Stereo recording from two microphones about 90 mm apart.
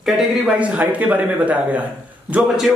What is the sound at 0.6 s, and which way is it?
A man's voice, 15° right (ahead or behind).